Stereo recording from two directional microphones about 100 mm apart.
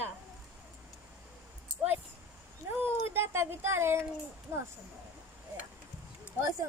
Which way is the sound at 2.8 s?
25° right (ahead or behind).